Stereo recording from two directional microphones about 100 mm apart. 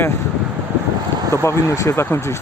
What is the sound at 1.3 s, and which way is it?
Speech, 25° left (ahead or behind).